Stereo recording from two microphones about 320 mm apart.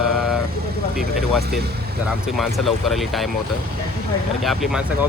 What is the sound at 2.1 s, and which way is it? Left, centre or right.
Speech, centre.